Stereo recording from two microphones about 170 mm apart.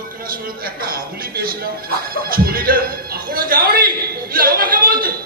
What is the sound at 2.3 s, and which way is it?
Music, 60° right (ahead or behind).